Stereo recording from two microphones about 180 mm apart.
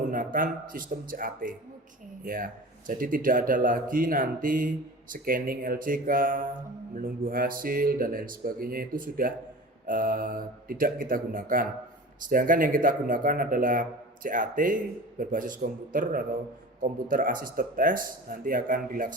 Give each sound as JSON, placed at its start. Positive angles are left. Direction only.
{"t": 0.1, "sound": "speech", "side_deg": -50}